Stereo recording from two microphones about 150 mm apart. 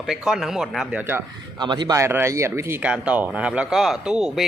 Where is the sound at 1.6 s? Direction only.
30° right (ahead or behind).